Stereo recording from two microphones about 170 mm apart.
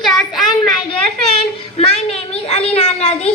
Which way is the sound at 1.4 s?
35° left (ahead or behind).